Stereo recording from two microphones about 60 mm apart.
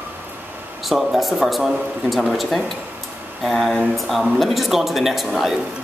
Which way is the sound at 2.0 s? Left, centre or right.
Centre.